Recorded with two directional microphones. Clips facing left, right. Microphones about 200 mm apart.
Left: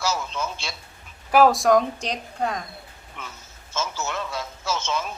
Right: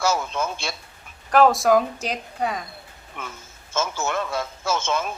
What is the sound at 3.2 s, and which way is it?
Speech, 50° right (ahead or behind).